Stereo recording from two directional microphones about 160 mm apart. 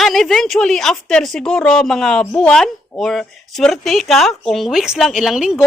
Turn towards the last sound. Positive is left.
turn(degrees=0)  # may be behind; listen again after turning